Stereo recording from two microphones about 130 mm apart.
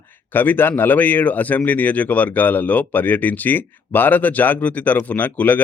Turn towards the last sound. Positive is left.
turn(degrees=15)  # may be behind; listen again after turning